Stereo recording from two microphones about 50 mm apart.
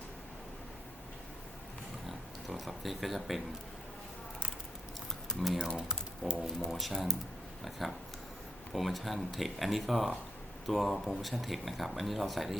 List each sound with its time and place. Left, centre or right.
2.0 s a sound: centre
5.6 s speech: centre
6.2 s speech: centre
6.6 s speech: centre